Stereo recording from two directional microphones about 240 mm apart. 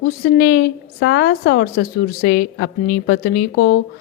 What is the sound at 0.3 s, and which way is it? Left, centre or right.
A woman's voice, left.